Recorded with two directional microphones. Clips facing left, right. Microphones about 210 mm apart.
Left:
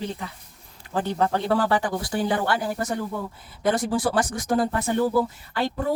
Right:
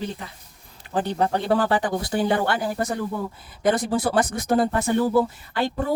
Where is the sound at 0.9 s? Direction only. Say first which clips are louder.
Right 1 dB; 15° right (ahead or behind).